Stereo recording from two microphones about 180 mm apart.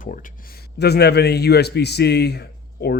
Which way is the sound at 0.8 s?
65° left (ahead or behind).